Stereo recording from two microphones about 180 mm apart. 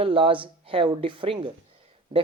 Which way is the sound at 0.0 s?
30° right (ahead or behind).